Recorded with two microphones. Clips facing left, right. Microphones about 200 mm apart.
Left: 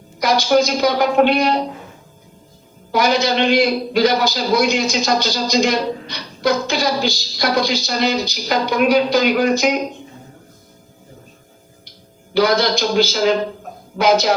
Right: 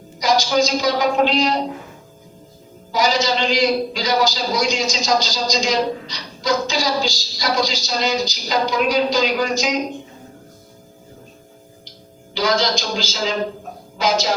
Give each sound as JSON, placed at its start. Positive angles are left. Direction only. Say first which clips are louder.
{"t": 0.2, "sound": "a man's voice", "louder": "left 2 dB", "side_deg": 60}
{"t": 2.9, "sound": "a man's voice", "louder": "left 2 dB", "side_deg": 60}
{"t": 12.3, "sound": "a man's voice", "louder": "left 4 dB", "side_deg": 60}